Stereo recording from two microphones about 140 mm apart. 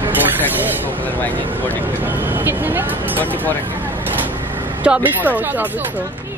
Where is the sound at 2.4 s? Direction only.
15° right (ahead or behind).